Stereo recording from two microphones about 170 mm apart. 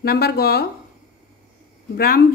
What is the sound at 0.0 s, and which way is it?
Speech, 65° left (ahead or behind).